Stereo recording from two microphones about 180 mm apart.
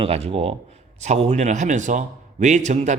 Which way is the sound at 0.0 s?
30° right (ahead or behind).